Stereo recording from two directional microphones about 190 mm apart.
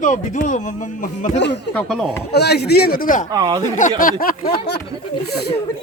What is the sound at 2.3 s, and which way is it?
Speech, 60° left (ahead or behind).